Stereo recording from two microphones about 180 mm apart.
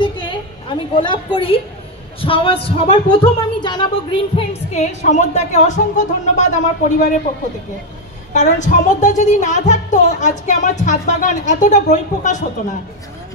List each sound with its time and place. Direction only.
0.0 s a sound: 25° left (ahead or behind)
2.2 s speech: 30° left (ahead or behind)
5.0 s speech: 40° left (ahead or behind)
8.3 s a woman's voice: 45° left (ahead or behind)